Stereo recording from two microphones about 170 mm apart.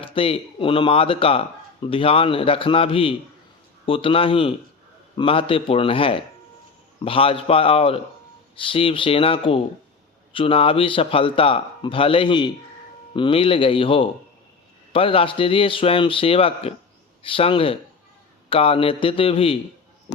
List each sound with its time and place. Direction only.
0.0 s speech: 30° left (ahead or behind)